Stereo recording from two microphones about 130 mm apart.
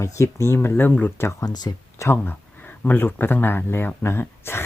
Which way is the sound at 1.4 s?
30° left (ahead or behind).